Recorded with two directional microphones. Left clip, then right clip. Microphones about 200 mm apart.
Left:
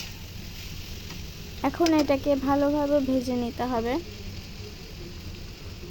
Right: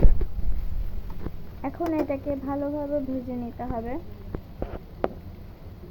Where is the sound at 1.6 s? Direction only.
65° left (ahead or behind); by 3.0 s 45° left (ahead or behind).